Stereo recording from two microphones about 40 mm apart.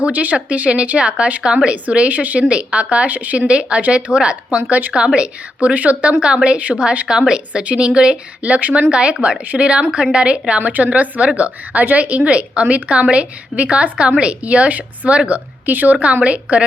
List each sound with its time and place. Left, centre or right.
0.0 s a woman's voice: right
2.0 s a woman's voice: right
2.4 s a woman's voice: right
3.8 s a woman's voice: right
4.1 s a woman's voice: right
6.6 s a woman's voice: right
7.1 s speech: centre
10.6 s a woman's voice: right
15.3 s a woman's voice: right
16.2 s a woman's voice: right